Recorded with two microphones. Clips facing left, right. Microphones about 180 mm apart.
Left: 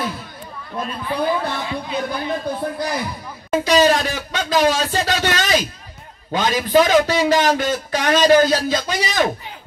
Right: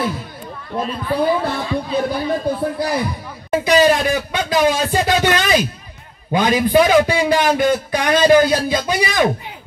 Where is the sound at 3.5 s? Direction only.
10° right (ahead or behind).